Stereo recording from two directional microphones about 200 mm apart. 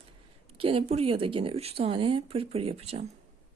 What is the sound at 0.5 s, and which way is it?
A woman's voice, 25° right (ahead or behind).